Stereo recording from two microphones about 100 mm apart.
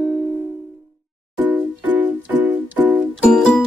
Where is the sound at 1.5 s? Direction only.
15° right (ahead or behind).